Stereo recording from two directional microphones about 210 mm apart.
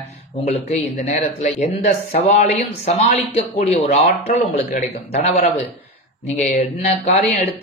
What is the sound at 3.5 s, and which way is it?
Speech, 30° left (ahead or behind).